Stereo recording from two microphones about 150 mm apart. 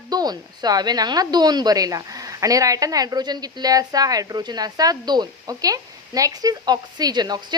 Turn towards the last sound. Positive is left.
turn(degrees=-30)  # may be behind; listen again after turning